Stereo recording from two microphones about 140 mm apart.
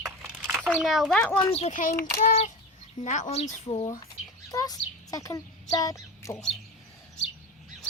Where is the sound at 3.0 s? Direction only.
60° left (ahead or behind).